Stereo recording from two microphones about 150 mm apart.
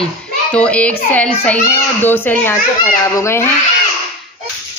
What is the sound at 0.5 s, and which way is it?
A child's voice, 10° left (ahead or behind).